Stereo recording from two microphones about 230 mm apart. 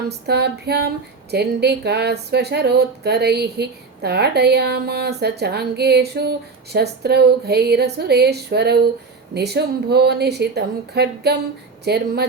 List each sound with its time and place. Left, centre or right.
0.3 s speech: right